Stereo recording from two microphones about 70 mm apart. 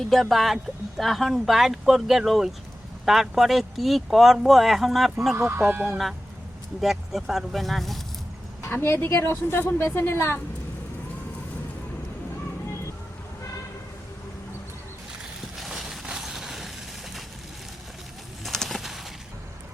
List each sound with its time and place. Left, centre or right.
0.0 s speech: centre
5.4 s speech: right
6.8 s speech: centre
8.6 s a woman's voice: left
15.5 s a sound: centre
18.4 s bird: centre